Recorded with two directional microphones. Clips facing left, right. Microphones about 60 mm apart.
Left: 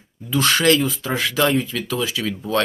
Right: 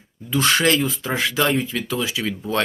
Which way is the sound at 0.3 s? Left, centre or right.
Centre.